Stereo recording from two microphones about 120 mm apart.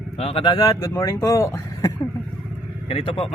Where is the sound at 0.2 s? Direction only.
55° left (ahead or behind).